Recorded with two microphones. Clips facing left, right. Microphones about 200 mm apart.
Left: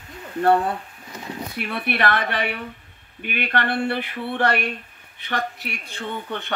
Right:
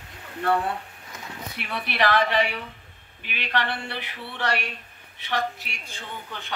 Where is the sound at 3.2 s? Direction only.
55° left (ahead or behind).